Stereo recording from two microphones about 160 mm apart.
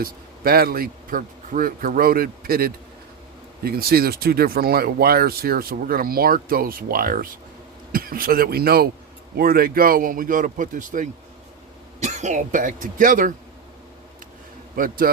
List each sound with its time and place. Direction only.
0.0 s speech: 70° right (ahead or behind)
14.8 s speech: 60° right (ahead or behind)